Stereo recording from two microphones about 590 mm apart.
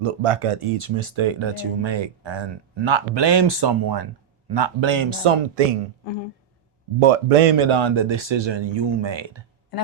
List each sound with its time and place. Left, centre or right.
0.0 s speech: right
7.0 s speech: right